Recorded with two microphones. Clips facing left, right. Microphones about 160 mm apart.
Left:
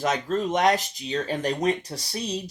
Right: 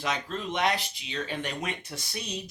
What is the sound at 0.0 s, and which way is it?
Speech, 45° left (ahead or behind).